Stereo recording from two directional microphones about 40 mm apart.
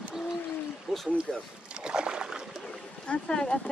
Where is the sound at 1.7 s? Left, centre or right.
Right.